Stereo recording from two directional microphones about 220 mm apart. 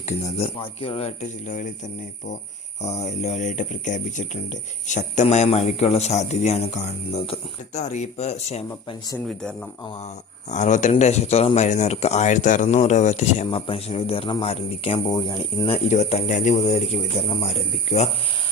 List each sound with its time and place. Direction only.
0.6 s speech: 25° left (ahead or behind)
2.8 s speech: 30° left (ahead or behind)
9.2 s speech: 5° left (ahead or behind)
10.5 s speech: 35° left (ahead or behind)